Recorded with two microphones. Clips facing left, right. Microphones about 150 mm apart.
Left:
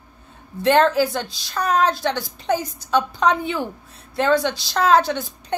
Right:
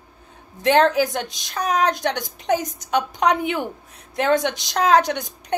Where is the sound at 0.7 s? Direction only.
15° right (ahead or behind).